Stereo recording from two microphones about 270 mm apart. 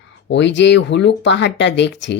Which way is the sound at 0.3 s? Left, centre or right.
Left.